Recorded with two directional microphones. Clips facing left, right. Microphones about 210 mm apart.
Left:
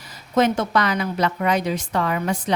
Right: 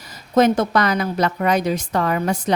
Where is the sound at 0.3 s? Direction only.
40° right (ahead or behind).